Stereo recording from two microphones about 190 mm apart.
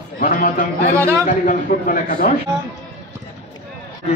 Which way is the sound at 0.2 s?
50° left (ahead or behind).